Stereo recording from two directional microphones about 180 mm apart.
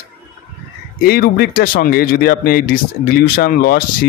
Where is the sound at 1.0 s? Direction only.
60° left (ahead or behind).